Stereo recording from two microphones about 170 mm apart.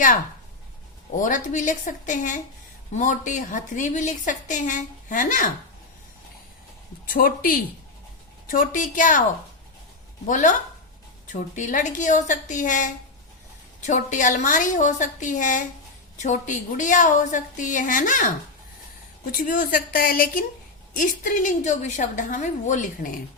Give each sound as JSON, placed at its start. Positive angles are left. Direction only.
{"t": 1.1, "sound": "a woman's voice", "side_deg": 50}
{"t": 7.1, "sound": "a woman's voice", "side_deg": 55}
{"t": 10.2, "sound": "a woman's voice", "side_deg": 50}